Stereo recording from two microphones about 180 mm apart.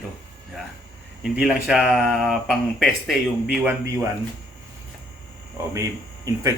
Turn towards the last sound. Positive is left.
turn(degrees=-15)  # may be behind; listen again after turning